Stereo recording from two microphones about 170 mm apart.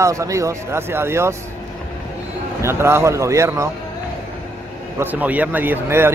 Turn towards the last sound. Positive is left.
turn(degrees=-10)  # may be behind; listen again after turning